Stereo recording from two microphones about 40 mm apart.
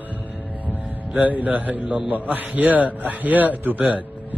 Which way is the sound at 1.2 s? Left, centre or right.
Right.